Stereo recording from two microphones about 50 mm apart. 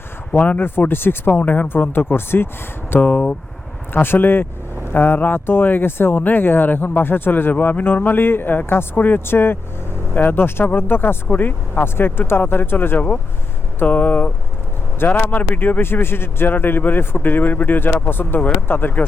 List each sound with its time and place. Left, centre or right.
0.3 s speech: left
0.9 s speech: left
1.6 s speech: left
3.0 s speech: left
3.9 s speech: left
7.5 s speech: left
13.8 s speech: left